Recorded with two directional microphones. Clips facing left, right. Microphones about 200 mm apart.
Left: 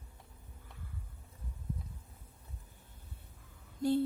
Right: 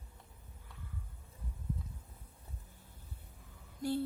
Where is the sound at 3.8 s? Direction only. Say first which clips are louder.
Left 5 dB; 20° left (ahead or behind).